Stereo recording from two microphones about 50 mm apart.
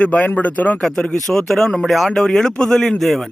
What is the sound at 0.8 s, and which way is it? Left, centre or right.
A man's voice, centre.